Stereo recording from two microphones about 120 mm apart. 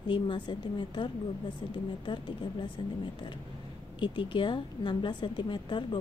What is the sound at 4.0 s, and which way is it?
A woman's voice, 45° left (ahead or behind).